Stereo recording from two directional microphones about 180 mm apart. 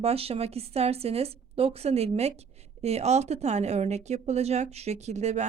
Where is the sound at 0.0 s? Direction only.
35° right (ahead or behind).